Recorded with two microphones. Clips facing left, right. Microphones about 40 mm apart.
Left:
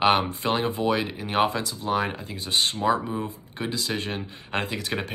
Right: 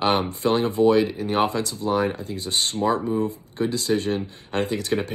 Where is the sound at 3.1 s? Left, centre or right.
Left.